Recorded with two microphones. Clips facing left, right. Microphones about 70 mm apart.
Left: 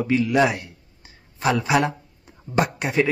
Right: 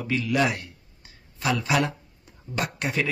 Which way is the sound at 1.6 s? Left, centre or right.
Left.